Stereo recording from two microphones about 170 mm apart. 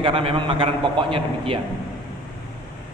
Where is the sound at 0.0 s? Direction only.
30° right (ahead or behind).